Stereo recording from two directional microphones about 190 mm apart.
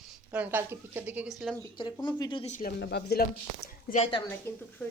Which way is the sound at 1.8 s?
25° left (ahead or behind).